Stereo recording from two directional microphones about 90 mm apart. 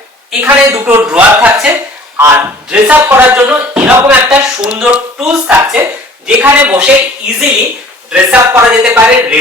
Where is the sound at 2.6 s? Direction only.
10° right (ahead or behind).